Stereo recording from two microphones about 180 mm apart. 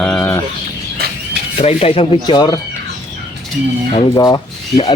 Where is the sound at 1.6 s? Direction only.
35° left (ahead or behind).